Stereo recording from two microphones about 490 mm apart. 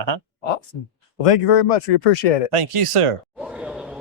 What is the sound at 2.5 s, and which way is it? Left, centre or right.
Speech, right.